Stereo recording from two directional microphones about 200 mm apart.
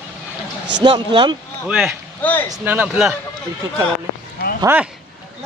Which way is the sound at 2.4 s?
10° right (ahead or behind).